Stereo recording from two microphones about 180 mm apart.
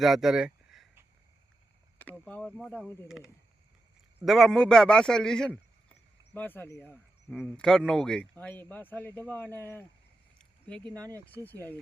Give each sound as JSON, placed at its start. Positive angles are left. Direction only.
{"t": 0.0, "sound": "speech", "side_deg": 0}
{"t": 2.0, "sound": "speech", "side_deg": 10}
{"t": 4.2, "sound": "a man's voice", "side_deg": 0}
{"t": 10.3, "sound": "a sound", "side_deg": 5}
{"t": 10.8, "sound": "speech", "side_deg": -20}
{"t": 11.4, "sound": "speech", "side_deg": 10}